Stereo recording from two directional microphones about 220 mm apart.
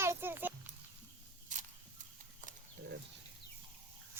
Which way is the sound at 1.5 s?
35° right (ahead or behind).